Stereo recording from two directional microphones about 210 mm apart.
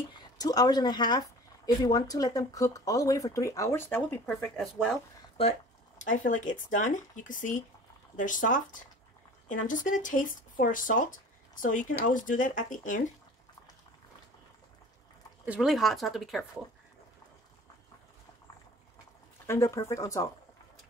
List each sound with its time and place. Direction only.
0.1 s speech: 20° left (ahead or behind)
5.4 s speech: 25° left (ahead or behind)
6.0 s speech: 40° left (ahead or behind)
15.4 s speech: 5° right (ahead or behind)
19.4 s speech: 15° left (ahead or behind)